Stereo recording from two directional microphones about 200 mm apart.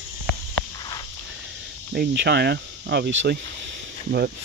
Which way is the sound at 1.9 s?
55° right (ahead or behind).